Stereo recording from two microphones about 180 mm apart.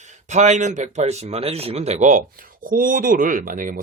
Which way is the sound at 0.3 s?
40° right (ahead or behind).